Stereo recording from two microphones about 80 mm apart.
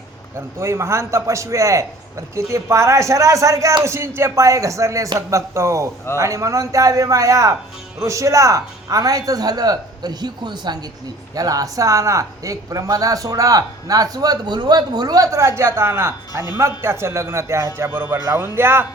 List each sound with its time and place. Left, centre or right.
0.3 s a man's voice: right
11.3 s a man's voice: right